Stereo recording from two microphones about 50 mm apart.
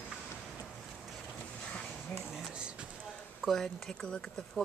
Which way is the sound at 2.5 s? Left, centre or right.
Centre.